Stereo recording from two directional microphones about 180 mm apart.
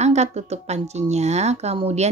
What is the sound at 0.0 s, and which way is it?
Speech, 40° right (ahead or behind).